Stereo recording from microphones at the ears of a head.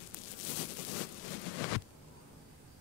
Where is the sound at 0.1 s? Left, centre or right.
Left.